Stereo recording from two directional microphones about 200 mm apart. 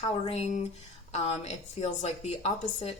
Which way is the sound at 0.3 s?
35° left (ahead or behind).